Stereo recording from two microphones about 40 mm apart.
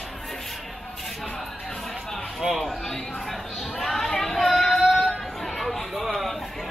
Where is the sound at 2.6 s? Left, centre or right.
Centre.